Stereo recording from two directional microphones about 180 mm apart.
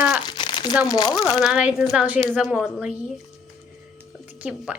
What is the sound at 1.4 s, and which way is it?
A woman's voice, 5° right (ahead or behind).